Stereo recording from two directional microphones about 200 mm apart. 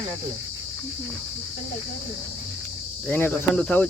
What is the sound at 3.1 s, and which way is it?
Speech, 10° left (ahead or behind).